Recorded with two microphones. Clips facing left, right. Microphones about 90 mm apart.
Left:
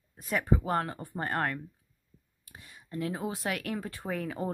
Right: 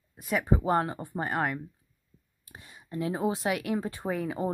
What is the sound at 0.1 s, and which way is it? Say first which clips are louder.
Speech: right 2 dB; 5° right (ahead or behind).